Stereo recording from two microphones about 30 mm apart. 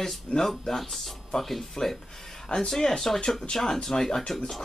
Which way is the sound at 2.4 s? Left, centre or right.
Left.